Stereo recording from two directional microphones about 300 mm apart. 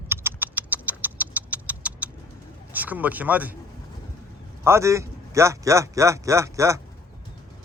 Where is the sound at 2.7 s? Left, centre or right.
Centre.